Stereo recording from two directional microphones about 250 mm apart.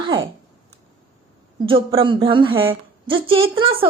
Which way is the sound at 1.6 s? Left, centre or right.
Right.